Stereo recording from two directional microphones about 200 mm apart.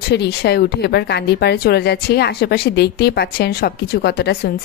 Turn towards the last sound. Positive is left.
turn(degrees=50)  # may be behind; listen again after turning